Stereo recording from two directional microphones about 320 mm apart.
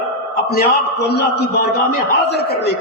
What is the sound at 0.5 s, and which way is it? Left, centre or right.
A man's voice, left.